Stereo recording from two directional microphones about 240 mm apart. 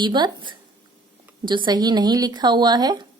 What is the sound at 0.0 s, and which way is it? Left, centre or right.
Speech, centre.